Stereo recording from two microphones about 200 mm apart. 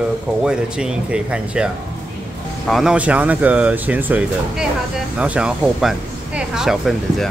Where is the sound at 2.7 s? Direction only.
5° right (ahead or behind).